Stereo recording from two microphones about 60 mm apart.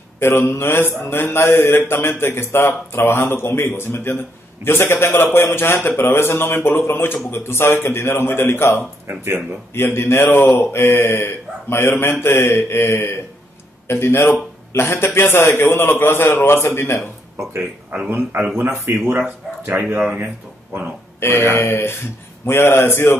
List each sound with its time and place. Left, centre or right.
0.2 s mantra: left
5.9 s a man's voice: left
9.8 s mantra: left
10.2 s a man's voice: left
10.7 s mantra: left
14.7 s a man's voice: left
16.3 s mantra: left
17.4 s speech: right
17.9 s speech: right
21.2 s a man's voice: left
21.5 s mantra: left